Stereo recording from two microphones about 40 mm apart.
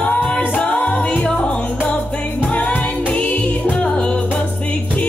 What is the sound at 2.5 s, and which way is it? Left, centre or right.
Music, left.